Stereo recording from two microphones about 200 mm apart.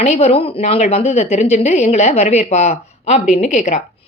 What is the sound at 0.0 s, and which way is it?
Speech, 30° left (ahead or behind).